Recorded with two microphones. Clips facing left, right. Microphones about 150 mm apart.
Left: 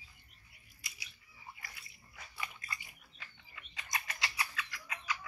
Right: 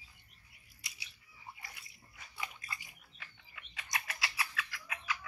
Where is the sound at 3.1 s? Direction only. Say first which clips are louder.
Even; 5° right (ahead or behind).